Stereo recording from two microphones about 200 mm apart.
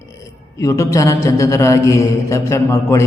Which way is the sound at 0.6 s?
15° left (ahead or behind).